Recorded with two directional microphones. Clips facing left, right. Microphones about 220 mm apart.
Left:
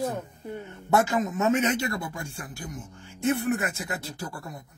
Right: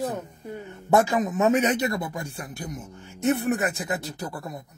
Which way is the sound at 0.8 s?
15° right (ahead or behind).